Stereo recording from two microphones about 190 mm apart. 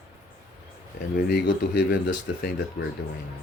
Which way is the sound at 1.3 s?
60° left (ahead or behind).